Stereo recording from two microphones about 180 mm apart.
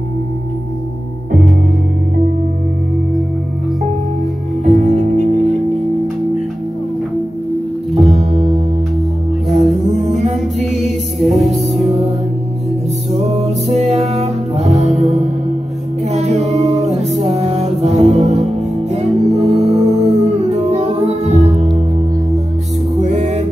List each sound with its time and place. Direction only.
4.6 s music: 45° right (ahead or behind)
7.9 s music: 35° right (ahead or behind)
9.6 s music: 40° right (ahead or behind)
11.1 s music: centre (ahead or behind)
13.1 s music: 35° right (ahead or behind)
22.9 s music: 40° right (ahead or behind)